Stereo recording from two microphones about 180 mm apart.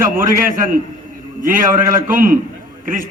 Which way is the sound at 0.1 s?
50° right (ahead or behind).